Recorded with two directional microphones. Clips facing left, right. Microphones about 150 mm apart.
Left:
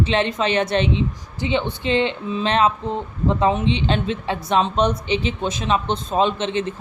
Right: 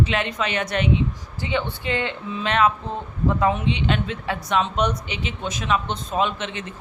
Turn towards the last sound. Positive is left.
turn(degrees=30)  # may be behind; listen again after turning